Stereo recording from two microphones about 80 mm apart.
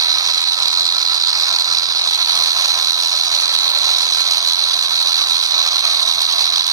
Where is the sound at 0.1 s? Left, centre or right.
Right.